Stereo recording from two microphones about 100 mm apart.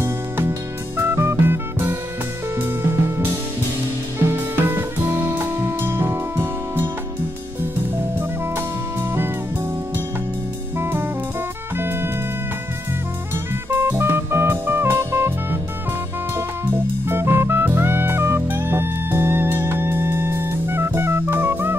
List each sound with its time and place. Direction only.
0.0 s music: 25° right (ahead or behind)
4.3 s music: 20° right (ahead or behind)
10.8 s jazz: 20° right (ahead or behind)
11.7 s music: 20° right (ahead or behind)
13.7 s music: 20° right (ahead or behind)
17.0 s music: 25° right (ahead or behind)